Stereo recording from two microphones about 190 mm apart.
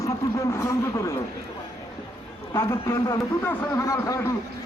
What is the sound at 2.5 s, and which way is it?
A man's voice, 15° left (ahead or behind).